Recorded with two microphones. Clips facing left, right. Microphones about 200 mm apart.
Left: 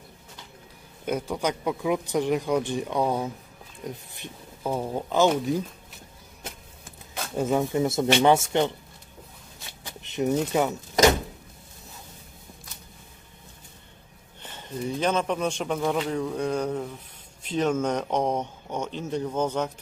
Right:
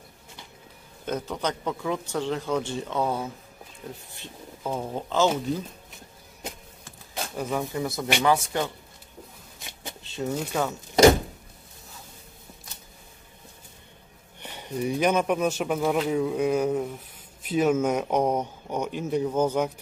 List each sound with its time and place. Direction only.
1.0 s speech: 10° left (ahead or behind)
7.3 s speech: 20° left (ahead or behind)
10.0 s speech: 20° left (ahead or behind)
14.4 s speech: 15° right (ahead or behind)